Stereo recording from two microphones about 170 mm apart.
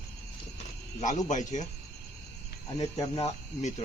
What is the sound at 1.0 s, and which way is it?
Speech, 45° left (ahead or behind).